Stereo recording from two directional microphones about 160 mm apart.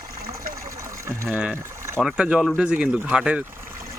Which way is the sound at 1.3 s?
5° right (ahead or behind).